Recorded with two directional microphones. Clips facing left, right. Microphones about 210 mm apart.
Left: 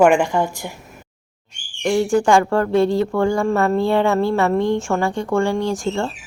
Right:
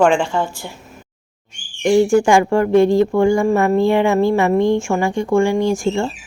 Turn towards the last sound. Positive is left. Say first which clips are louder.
# right 4 dB
turn(degrees=-10)  # may be behind; listen again after turning